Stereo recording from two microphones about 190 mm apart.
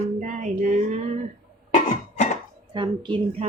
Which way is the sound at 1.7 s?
40° left (ahead or behind).